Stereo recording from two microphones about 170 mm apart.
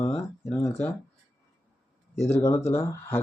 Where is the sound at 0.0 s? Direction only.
10° left (ahead or behind).